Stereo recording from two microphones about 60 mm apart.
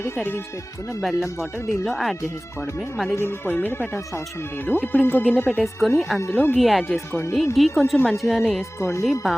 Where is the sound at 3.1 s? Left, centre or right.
Left.